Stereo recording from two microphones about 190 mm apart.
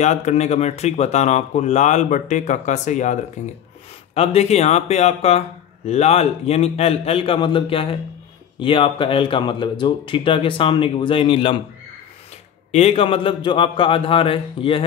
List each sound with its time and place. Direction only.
0.0 s speech: 35° left (ahead or behind)
12.7 s speech: 30° left (ahead or behind)